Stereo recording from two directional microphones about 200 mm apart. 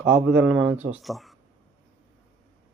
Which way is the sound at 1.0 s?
Centre (ahead or behind).